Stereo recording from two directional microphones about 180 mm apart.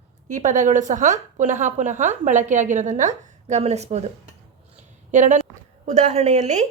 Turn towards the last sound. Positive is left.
turn(degrees=-40)  # may be behind; listen again after turning